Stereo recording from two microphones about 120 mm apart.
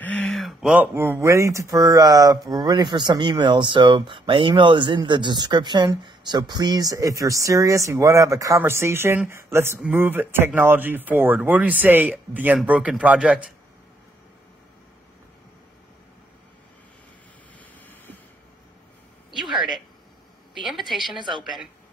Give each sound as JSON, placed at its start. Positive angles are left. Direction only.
{"t": 0.0, "sound": "a sound", "side_deg": 10}
{"t": 0.3, "sound": "a sound", "side_deg": 0}
{"t": 0.9, "sound": "speech", "side_deg": -20}
{"t": 17.8, "sound": "vehicle", "side_deg": 15}
{"t": 20.6, "sound": "a woman's voice", "side_deg": 0}
{"t": 21.2, "sound": "speech", "side_deg": -40}